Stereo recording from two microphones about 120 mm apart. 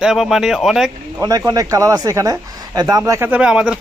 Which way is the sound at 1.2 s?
30° right (ahead or behind).